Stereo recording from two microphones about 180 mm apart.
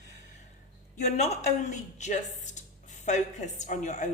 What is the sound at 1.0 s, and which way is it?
A woman's voice, 40° left (ahead or behind).